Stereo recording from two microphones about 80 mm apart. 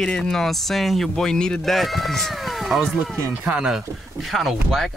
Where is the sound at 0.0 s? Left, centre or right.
Centre.